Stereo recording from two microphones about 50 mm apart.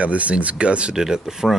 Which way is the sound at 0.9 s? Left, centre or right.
Centre.